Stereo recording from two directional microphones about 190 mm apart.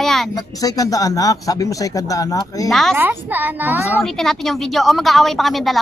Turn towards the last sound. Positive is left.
turn(degrees=0)  # may be behind; listen again after turning